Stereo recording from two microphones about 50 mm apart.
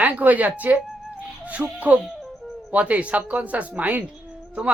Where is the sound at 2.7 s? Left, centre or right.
Right.